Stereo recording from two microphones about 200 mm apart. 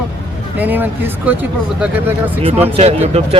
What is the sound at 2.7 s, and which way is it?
Speech, 30° right (ahead or behind).